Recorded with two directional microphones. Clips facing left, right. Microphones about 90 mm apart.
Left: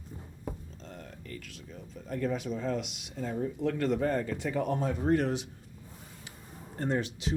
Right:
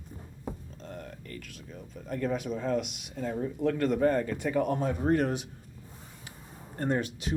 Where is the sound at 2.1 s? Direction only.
50° right (ahead or behind).